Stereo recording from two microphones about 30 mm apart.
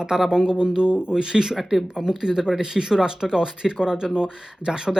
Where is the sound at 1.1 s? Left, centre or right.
Right.